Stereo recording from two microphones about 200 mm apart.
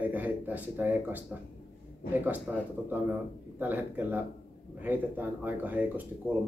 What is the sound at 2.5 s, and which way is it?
A man's voice, centre (ahead or behind).